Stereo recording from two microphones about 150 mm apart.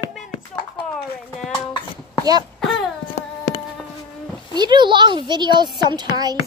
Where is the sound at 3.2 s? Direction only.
65° left (ahead or behind).